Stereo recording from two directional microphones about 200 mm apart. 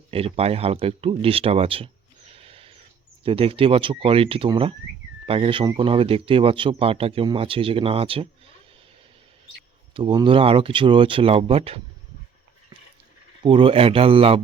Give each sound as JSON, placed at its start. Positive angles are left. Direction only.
{"t": 0.1, "sound": "speech", "side_deg": -30}
{"t": 2.3, "sound": "a sound", "side_deg": -30}
{"t": 3.2, "sound": "speech", "side_deg": -25}
{"t": 9.9, "sound": "speech", "side_deg": -25}
{"t": 13.4, "sound": "speech", "side_deg": -25}